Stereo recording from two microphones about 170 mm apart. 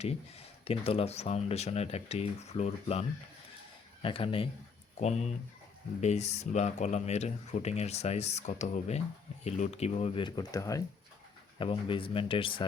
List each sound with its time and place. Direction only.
0.0 s speech: 35° left (ahead or behind)
4.0 s speech: 30° left (ahead or behind)
11.6 s speech: 30° left (ahead or behind)